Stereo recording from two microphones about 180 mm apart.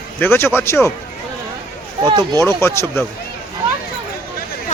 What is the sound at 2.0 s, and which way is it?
Speech, 25° right (ahead or behind).